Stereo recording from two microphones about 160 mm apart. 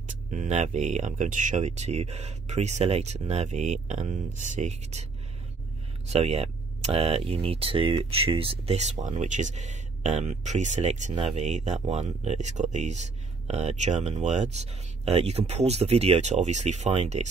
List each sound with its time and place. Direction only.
0.3 s speech: 45° right (ahead or behind)
6.0 s speech: 40° right (ahead or behind)